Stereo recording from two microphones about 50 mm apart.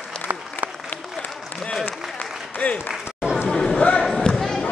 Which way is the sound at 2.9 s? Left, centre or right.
Centre.